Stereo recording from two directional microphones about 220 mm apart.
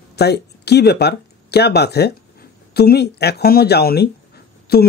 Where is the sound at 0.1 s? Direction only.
50° left (ahead or behind).